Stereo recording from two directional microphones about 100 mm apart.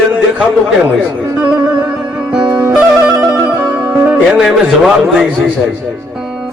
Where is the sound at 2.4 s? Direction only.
5° right (ahead or behind).